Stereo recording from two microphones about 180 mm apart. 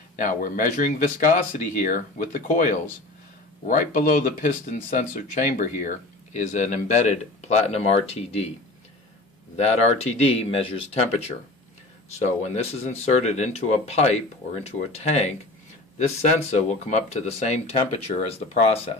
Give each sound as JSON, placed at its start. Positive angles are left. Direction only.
{"t": 0.1, "sound": "speech", "side_deg": 45}
{"t": 9.6, "sound": "speech", "side_deg": 35}